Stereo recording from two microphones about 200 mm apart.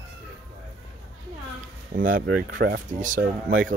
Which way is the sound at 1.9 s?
45° right (ahead or behind).